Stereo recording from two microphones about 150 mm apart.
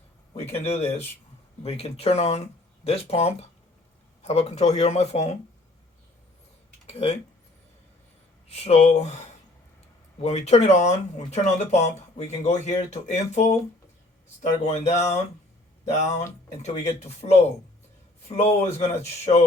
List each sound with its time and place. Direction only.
0.3 s speech: 45° left (ahead or behind)
6.8 s speech: 45° left (ahead or behind)
8.4 s speech: 45° left (ahead or behind)
10.2 s speech: 45° left (ahead or behind)
16.6 s speech: 45° left (ahead or behind)